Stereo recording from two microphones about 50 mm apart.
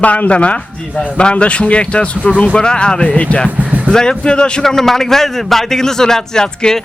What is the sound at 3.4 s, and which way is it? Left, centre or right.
Speech, right.